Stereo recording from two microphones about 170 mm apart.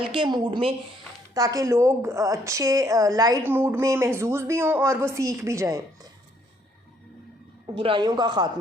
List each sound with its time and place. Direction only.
0.0 s a woman's voice: 30° right (ahead or behind)
7.8 s speech: 30° right (ahead or behind)